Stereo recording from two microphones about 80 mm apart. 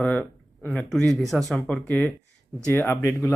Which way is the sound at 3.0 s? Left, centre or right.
Left.